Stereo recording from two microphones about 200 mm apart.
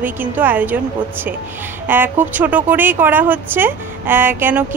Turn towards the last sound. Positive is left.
turn(degrees=-10)  # may be behind; listen again after turning